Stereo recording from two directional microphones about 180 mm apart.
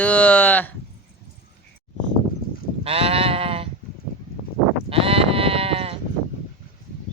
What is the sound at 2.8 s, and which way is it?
Sheep, 30° right (ahead or behind).